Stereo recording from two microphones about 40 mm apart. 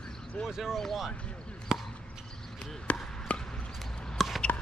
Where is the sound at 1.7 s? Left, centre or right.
Centre.